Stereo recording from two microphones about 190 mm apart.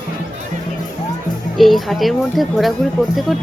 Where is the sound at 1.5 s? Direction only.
Centre (ahead or behind).